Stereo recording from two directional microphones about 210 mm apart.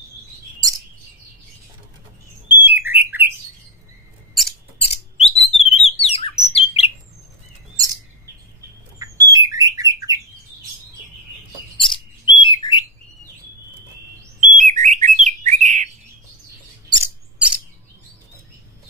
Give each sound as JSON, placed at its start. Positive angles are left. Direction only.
{"t": 2.5, "sound": "bird", "side_deg": -10}
{"t": 4.3, "sound": "mouse", "side_deg": 0}
{"t": 4.7, "sound": "a sound", "side_deg": 30}
{"t": 5.4, "sound": "bird", "side_deg": 30}
{"t": 7.7, "sound": "chirp", "side_deg": -15}
{"t": 9.0, "sound": "bird", "side_deg": -15}
{"t": 11.8, "sound": "bird", "side_deg": 25}
{"t": 14.4, "sound": "bird", "side_deg": -35}
{"t": 16.9, "sound": "mouse", "side_deg": -10}